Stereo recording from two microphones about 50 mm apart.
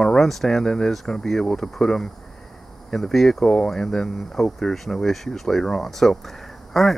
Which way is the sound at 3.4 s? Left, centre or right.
Centre.